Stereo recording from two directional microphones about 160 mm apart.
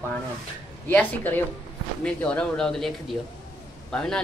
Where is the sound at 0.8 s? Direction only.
10° left (ahead or behind).